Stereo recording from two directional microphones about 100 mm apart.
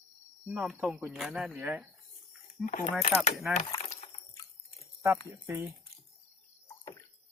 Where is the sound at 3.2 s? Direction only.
5° right (ahead or behind).